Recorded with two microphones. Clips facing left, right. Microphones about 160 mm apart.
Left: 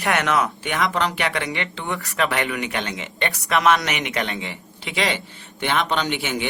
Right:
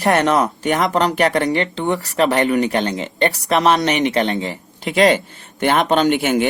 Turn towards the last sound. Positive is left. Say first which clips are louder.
# right 9 dB
turn(degrees=-45)  # may be behind; listen again after turning